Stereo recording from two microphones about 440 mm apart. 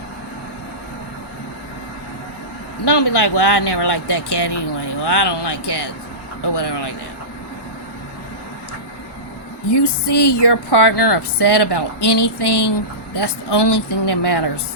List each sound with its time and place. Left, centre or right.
2.8 s speech: left
9.7 s speech: left